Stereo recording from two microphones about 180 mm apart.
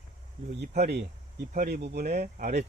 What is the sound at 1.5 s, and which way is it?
Speech, 55° right (ahead or behind).